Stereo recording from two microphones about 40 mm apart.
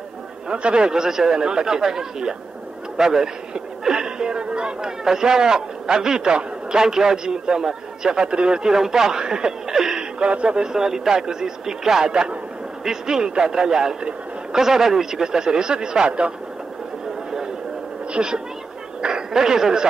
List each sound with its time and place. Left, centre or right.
0.5 s a man's voice: right
9.7 s a sound: centre
10.1 s speech: right
10.6 s a man's voice: centre
18.1 s a woman's voice: right